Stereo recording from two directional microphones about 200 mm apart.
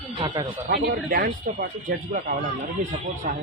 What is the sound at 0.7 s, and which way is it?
Speech, 45° right (ahead or behind).